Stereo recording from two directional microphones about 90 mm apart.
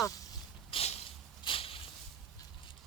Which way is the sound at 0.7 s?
80° left.